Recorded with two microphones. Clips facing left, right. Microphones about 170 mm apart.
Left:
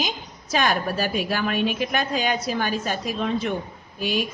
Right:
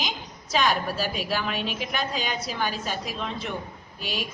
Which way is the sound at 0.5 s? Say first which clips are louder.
Left 2 dB; 55° left (ahead or behind).